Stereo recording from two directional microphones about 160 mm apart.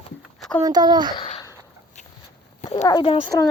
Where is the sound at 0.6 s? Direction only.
25° right (ahead or behind).